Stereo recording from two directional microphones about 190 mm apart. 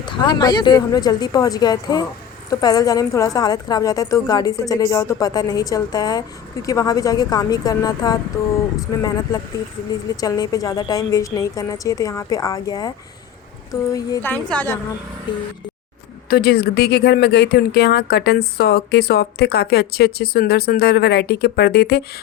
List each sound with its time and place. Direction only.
0.3 s a woman's voice: 20° left (ahead or behind)
15.3 s a woman's voice: 25° left (ahead or behind)
16.3 s speech: 55° left (ahead or behind)